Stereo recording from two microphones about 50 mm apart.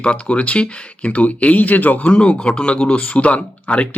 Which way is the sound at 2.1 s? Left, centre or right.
Centre.